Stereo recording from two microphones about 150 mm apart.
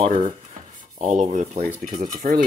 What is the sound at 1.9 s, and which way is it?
Cutlery, 65° right (ahead or behind).